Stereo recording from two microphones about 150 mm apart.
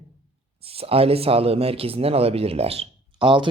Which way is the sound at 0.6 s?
40° right (ahead or behind).